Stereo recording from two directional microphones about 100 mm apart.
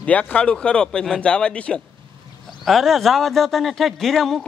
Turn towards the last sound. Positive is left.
turn(degrees=0)  # may be behind; listen again after turning